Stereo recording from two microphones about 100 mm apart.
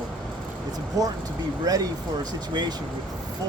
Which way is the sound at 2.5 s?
45° right (ahead or behind).